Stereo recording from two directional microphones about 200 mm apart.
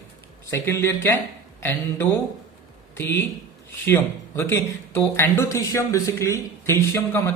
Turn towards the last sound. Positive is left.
turn(degrees=10)  # may be behind; listen again after turning